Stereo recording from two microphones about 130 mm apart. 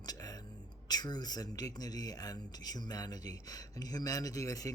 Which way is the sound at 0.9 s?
30° left (ahead or behind).